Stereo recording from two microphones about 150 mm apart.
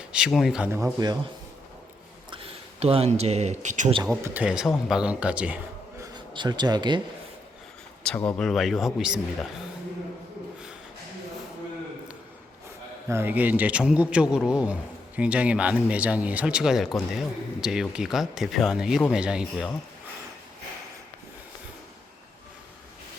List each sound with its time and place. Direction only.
0.0 s speech: 5° right (ahead or behind)
0.7 s speech: 20° right (ahead or behind)
2.3 s speech: 40° right (ahead or behind)
4.1 s a man's voice: 10° right (ahead or behind)
6.0 s speech: 30° right (ahead or behind)
8.0 s a man's voice: 10° left (ahead or behind)
13.1 s a man's voice: 15° right (ahead or behind)